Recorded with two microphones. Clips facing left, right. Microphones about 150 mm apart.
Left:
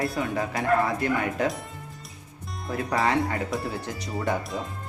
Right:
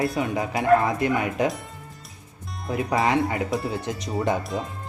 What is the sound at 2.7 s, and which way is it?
Speech, 20° right (ahead or behind).